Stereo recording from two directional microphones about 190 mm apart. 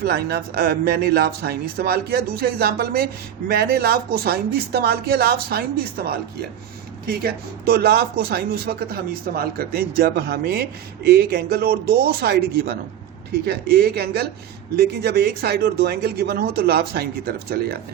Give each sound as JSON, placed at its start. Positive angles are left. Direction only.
{"t": 0.0, "sound": "speech", "side_deg": -55}